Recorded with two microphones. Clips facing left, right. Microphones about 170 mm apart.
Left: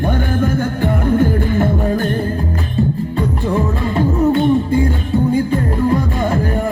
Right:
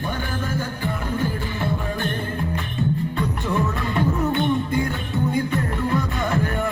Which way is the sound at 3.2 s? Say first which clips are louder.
Left 9 dB; 30° left (ahead or behind).